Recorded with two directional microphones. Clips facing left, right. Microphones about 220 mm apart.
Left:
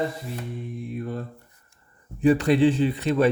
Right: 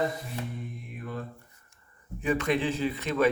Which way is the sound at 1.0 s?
35° left (ahead or behind).